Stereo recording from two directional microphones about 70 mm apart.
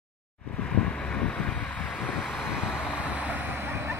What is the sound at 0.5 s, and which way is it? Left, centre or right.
Vehicle, centre.